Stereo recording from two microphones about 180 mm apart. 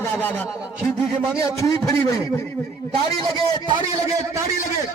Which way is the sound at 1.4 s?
20° left (ahead or behind).